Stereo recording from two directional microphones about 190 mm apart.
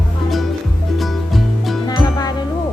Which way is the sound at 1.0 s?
Centre (ahead or behind).